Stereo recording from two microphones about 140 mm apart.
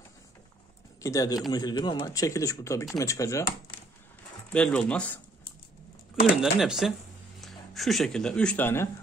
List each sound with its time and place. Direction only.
1.0 s speech: 25° left (ahead or behind)
4.5 s speech: 5° left (ahead or behind)
6.3 s speech: 5° right (ahead or behind); by 8.8 s 15° left (ahead or behind)